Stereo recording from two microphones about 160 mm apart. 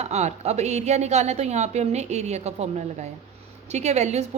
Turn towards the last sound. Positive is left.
turn(degrees=-45)  # may be behind; listen again after turning